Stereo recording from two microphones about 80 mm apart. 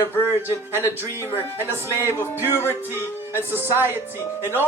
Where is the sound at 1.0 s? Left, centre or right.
Left.